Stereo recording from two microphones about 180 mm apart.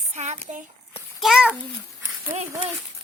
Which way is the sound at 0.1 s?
40° right (ahead or behind).